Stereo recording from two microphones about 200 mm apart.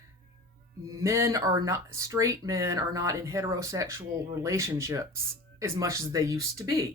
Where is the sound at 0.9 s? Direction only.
15° right (ahead or behind).